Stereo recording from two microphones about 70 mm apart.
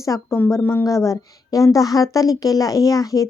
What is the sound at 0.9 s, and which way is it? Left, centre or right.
A woman's voice, left.